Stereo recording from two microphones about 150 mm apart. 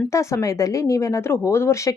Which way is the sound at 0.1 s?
20° left (ahead or behind).